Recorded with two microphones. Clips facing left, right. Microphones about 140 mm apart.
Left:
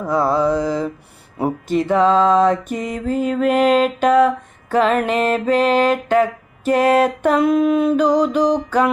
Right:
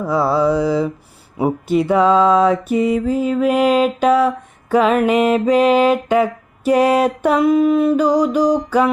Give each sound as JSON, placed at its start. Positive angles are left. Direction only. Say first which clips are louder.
{"t": 0.0, "sound": "music", "louder": "right 1 dB", "side_deg": -5}